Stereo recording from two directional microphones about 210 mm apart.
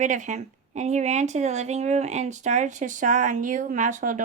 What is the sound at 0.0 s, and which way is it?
A woman's voice, 35° right (ahead or behind).